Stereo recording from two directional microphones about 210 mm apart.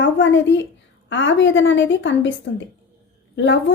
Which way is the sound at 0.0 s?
60° left (ahead or behind).